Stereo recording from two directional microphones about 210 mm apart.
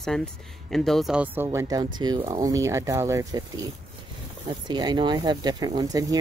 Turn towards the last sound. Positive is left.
turn(degrees=-15)  # may be behind; listen again after turning